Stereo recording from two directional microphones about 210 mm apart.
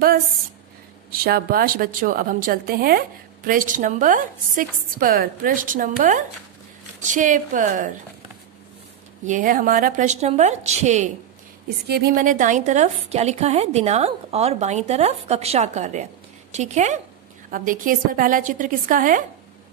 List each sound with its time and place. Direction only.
1.1 s a woman's voice: 45° right (ahead or behind)
9.2 s a woman's voice: 40° right (ahead or behind)
11.9 s a woman's voice: 45° right (ahead or behind)